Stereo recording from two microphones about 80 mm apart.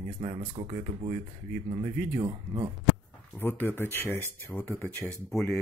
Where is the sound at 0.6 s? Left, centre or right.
Right.